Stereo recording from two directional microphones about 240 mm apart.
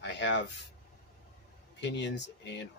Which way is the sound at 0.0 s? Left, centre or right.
Left.